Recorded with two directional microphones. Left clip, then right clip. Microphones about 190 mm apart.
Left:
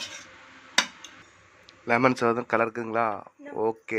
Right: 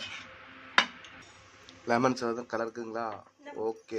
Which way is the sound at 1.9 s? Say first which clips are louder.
Left 6 dB; 10° left (ahead or behind).